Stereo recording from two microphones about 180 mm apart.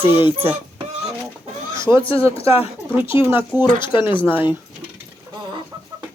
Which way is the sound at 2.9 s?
10° right (ahead or behind).